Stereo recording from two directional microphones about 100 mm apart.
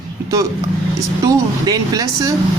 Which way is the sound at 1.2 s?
40° right (ahead or behind).